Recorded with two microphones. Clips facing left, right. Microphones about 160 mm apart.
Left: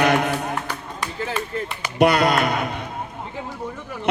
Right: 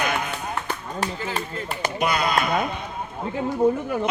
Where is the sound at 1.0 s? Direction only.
40° right (ahead or behind).